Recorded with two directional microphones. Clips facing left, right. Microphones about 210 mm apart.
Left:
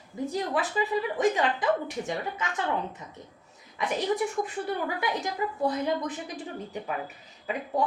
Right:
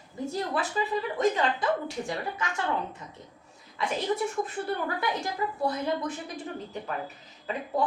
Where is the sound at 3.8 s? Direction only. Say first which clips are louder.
Left 1 dB; 15° left (ahead or behind).